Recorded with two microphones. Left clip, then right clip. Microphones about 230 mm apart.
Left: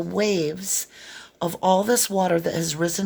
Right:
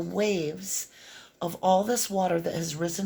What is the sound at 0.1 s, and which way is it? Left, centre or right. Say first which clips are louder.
Speech: left 5 dB; left.